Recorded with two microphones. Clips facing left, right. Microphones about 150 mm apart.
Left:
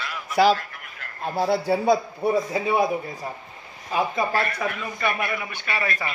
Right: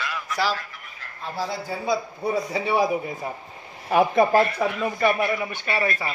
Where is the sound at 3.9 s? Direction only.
60° right (ahead or behind).